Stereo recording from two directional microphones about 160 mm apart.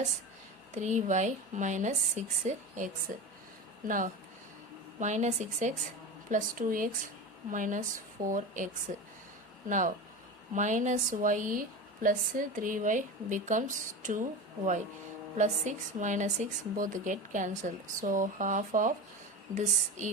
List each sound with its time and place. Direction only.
0.7 s speech: 45° right (ahead or behind)
6.3 s speech: 60° right (ahead or behind)